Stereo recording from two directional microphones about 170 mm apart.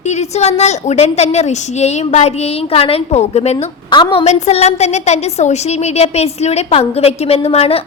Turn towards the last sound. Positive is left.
turn(degrees=40)  # may be behind; listen again after turning